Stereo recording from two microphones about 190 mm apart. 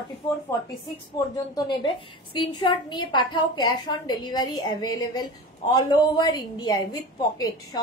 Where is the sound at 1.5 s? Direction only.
25° left (ahead or behind).